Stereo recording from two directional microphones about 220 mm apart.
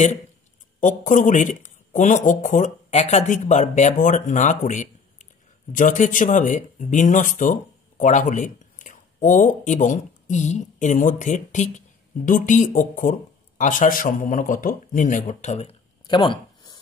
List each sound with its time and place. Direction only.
0.7 s a man's voice: 35° left (ahead or behind)